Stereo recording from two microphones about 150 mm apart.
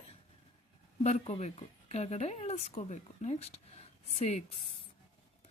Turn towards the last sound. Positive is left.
turn(degrees=45)  # may be behind; listen again after turning